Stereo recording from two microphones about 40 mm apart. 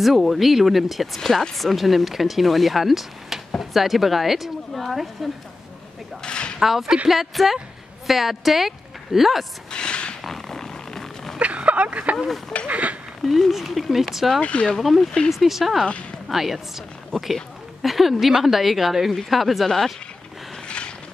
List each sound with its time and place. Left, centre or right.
0.0 s speech: centre
1.2 s speech: centre
6.2 s a sound: left
6.6 s a woman's voice: centre
9.7 s a sound: left
10.2 s a sound: centre
10.7 s vehicle: centre
11.3 s speech: right
13.5 s speech: centre
14.4 s speech: left
14.8 s speech: centre
17.1 s speech: centre
17.8 s speech: centre
20.6 s mechanisms: left